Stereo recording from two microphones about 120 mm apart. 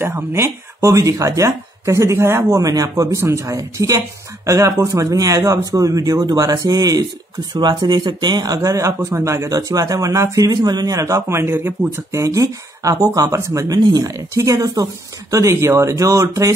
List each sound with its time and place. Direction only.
0.0 s speech: 20° right (ahead or behind)